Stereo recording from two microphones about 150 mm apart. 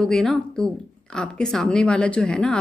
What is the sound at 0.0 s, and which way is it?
A woman's voice, 5° left (ahead or behind).